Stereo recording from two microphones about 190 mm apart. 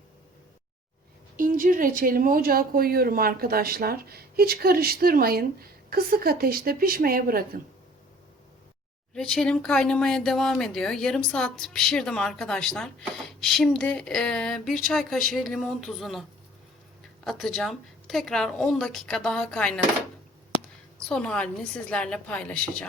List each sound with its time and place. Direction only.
1.4 s speech: 45° right (ahead or behind)
9.1 s speech: 5° left (ahead or behind)
17.2 s speech: centre (ahead or behind)
21.1 s speech: 5° left (ahead or behind)